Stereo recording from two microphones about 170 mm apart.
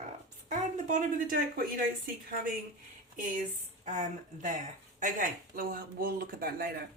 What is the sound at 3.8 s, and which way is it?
Speech, 45° right (ahead or behind).